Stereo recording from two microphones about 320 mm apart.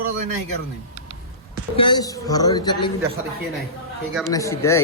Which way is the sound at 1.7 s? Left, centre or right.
Centre.